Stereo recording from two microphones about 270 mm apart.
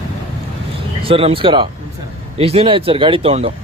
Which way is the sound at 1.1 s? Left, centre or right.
Centre.